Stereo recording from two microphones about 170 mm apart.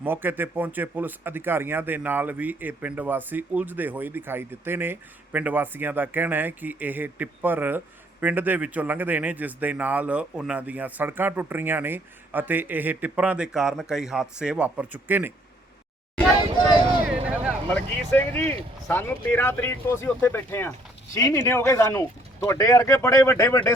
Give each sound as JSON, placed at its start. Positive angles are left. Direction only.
{"t": 0.0, "sound": "speech", "side_deg": -10}
{"t": 17.1, "sound": "vehicle", "side_deg": -5}
{"t": 17.7, "sound": "speech", "side_deg": 10}